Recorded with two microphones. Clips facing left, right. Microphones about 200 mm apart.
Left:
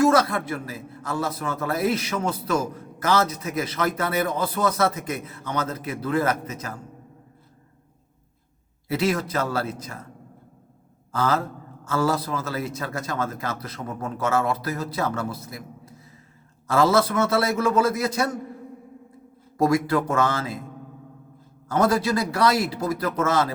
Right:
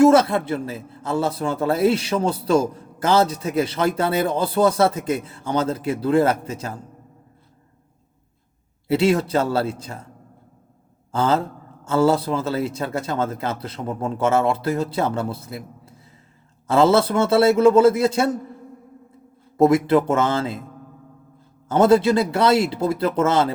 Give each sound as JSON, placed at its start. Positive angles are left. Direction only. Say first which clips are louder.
{"t": 0.0, "sound": "a man's voice", "louder": "right 5 dB", "side_deg": -25}
{"t": 8.9, "sound": "a man's voice", "louder": "right 6 dB", "side_deg": -30}
{"t": 11.1, "sound": "a man's voice", "louder": "right 4 dB", "side_deg": -25}
{"t": 19.5, "sound": "a man's voice", "louder": "right 5 dB", "side_deg": -25}
{"t": 21.7, "sound": "a man's voice", "louder": "right 6 dB", "side_deg": -25}